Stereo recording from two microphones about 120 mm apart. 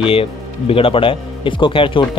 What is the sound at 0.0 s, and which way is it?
A man's voice, 50° left (ahead or behind).